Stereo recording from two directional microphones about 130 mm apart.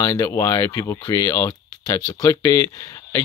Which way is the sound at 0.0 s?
25° left (ahead or behind).